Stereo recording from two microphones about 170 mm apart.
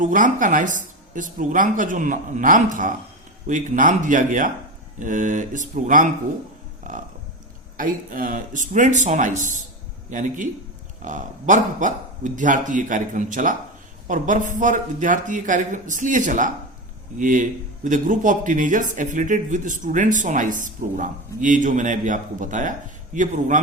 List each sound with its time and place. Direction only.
0.0 s speech: 50° right (ahead or behind)